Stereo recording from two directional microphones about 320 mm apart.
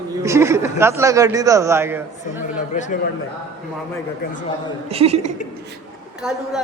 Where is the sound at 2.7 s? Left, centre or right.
Left.